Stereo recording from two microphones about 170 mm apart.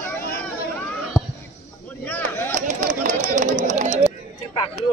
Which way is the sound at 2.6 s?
50° right (ahead or behind).